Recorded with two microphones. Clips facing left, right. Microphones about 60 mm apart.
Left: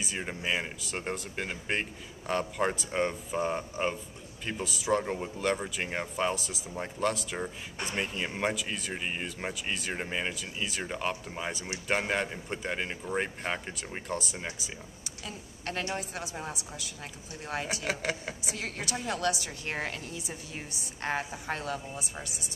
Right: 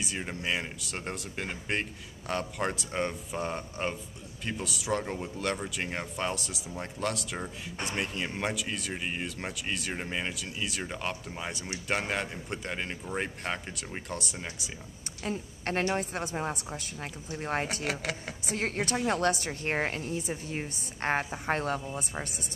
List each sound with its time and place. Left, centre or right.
0.0 s speech: centre
15.2 s a woman's voice: right
17.8 s speech: centre
18.5 s a woman's voice: right